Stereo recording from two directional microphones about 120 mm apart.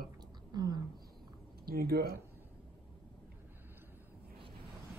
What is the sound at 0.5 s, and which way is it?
Speech, 35° right (ahead or behind).